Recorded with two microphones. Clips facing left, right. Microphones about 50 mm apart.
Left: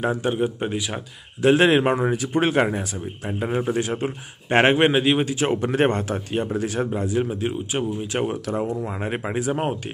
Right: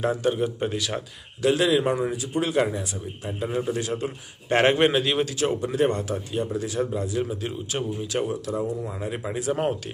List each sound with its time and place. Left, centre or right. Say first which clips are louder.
0.2 s speech: left 1 dB; left
1.4 s speech: left 4 dB; left
5.6 s speech: left 3 dB; left
8.3 s speech: left 2 dB; left
9.5 s speech: right 3 dB; left